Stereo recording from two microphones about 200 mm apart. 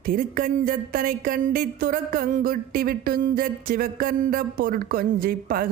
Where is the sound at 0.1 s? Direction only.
45° right (ahead or behind).